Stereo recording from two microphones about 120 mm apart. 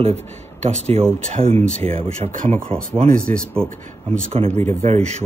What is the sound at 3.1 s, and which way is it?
Speech, 10° left (ahead or behind).